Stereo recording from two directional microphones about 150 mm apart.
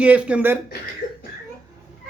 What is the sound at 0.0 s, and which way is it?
Speech, 10° right (ahead or behind).